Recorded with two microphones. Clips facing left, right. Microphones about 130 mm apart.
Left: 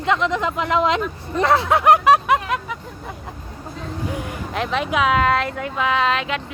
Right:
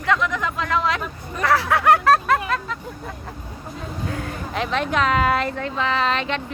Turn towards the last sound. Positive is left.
turn(degrees=5)  # may be behind; listen again after turning